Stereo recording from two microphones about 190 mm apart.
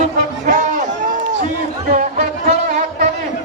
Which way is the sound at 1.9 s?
40° right (ahead or behind).